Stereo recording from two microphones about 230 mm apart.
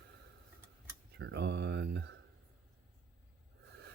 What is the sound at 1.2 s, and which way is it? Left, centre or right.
Speech, right.